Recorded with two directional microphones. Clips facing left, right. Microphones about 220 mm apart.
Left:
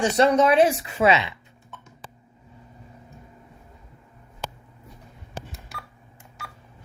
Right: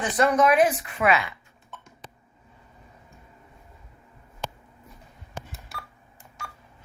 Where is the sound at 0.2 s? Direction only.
25° left (ahead or behind).